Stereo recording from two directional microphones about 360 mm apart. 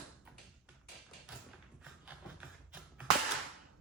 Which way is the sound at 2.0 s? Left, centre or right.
Centre.